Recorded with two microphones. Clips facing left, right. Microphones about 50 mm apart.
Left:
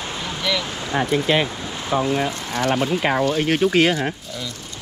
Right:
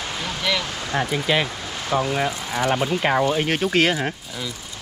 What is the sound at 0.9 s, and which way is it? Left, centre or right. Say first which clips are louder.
Speech: left 3 dB; centre.